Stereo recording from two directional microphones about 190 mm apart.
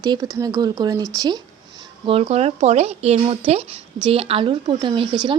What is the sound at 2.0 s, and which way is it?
Speech, 30° right (ahead or behind).